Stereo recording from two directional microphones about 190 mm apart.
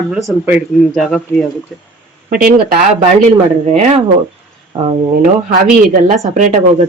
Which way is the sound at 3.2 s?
35° right (ahead or behind).